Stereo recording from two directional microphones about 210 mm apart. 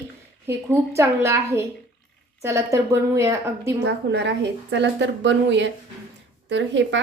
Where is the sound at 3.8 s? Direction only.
55° right (ahead or behind).